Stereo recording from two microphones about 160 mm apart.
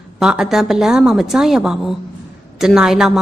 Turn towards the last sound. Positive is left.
turn(degrees=0)  # may be behind; listen again after turning